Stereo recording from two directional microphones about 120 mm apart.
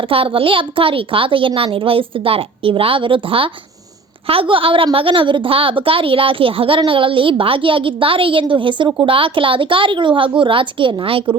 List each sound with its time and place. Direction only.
0.0 s a woman's voice: 50° right (ahead or behind)